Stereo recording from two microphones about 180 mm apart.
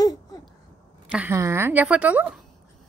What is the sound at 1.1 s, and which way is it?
A woman's voice, 10° right (ahead or behind).